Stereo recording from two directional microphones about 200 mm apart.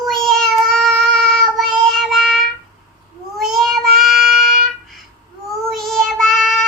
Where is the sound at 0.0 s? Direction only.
Centre (ahead or behind).